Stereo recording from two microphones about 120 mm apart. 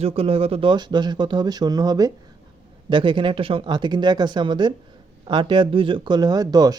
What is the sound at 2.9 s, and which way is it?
Speech, 45° right (ahead or behind).